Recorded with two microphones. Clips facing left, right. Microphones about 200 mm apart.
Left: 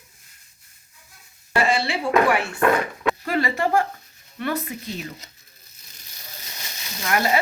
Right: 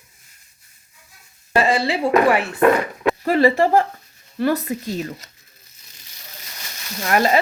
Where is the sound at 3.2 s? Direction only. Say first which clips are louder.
Right 10 dB; 35° right (ahead or behind).